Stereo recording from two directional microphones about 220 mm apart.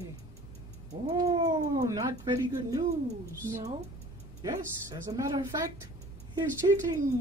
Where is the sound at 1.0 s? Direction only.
15° right (ahead or behind).